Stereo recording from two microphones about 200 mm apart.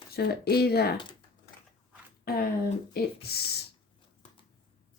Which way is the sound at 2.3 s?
50° left (ahead or behind).